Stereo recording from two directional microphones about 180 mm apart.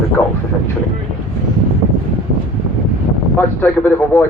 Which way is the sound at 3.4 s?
10° left (ahead or behind).